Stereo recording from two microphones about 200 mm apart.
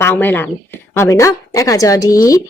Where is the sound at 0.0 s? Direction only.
10° left (ahead or behind).